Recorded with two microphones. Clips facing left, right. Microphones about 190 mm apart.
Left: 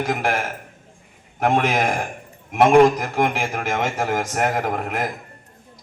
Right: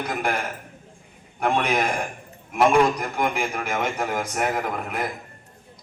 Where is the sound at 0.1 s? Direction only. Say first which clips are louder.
Left 1 dB; 90° left.